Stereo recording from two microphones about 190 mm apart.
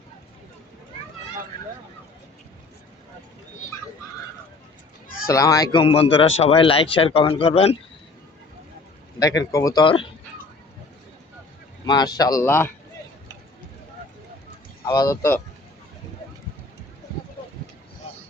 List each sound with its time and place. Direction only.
5.0 s a sound: 50° left (ahead or behind)
5.3 s speech: 15° left (ahead or behind)
5.8 s speech: 30° left (ahead or behind)
9.1 s speech: 20° left (ahead or behind)
11.9 s speech: 20° left (ahead or behind)
14.8 s speech: 20° left (ahead or behind)